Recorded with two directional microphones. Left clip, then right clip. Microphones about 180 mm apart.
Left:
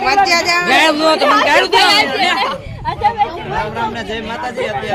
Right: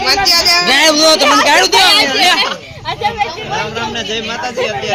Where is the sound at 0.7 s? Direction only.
50° right (ahead or behind).